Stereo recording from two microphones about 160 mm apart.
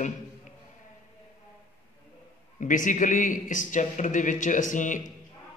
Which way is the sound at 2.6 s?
55° left (ahead or behind).